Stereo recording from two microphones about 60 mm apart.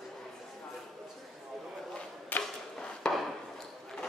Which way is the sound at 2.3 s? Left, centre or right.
Left.